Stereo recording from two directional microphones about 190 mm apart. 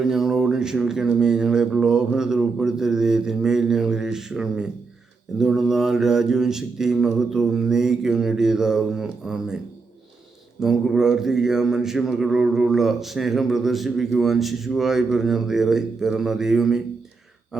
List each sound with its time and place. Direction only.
0.0 s mantra: 5° right (ahead or behind)
10.6 s mantra: 5° right (ahead or behind)
17.5 s a sound: centre (ahead or behind)